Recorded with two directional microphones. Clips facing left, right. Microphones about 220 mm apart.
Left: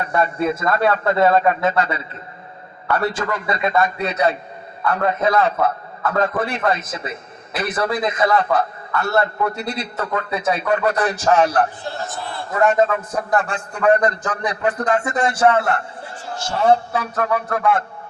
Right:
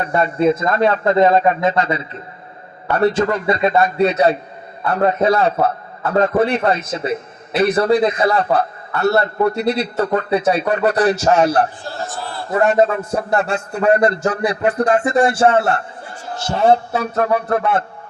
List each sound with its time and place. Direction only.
0.0 s speech: 25° right (ahead or behind)
2.9 s a man's voice: 30° right (ahead or behind)